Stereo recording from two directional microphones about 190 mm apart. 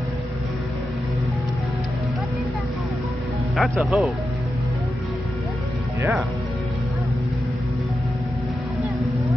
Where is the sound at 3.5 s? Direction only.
Centre (ahead or behind).